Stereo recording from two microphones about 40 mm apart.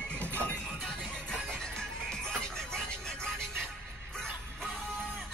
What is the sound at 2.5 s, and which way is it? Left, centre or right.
Music, centre.